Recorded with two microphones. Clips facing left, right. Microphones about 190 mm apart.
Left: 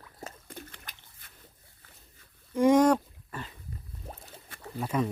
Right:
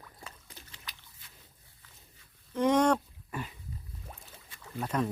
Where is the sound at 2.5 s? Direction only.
10° left (ahead or behind).